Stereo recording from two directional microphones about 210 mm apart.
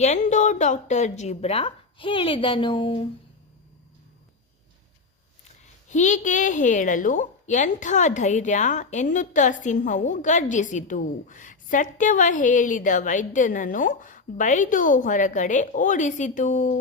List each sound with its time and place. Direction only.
0.0 s a woman's voice: 35° left (ahead or behind)
5.9 s a woman's voice: 35° left (ahead or behind)